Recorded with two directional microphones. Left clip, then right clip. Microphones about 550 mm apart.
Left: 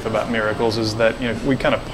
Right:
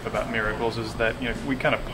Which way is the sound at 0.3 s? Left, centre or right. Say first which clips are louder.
Left 6 dB; left.